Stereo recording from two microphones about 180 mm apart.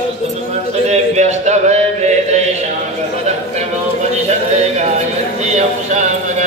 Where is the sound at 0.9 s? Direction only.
40° right (ahead or behind).